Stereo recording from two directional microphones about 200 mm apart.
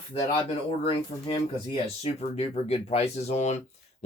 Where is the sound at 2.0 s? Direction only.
30° left (ahead or behind).